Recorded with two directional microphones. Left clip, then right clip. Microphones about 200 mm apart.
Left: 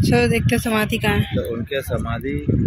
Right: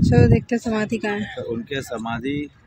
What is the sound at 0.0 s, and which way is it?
Speech, 10° right (ahead or behind).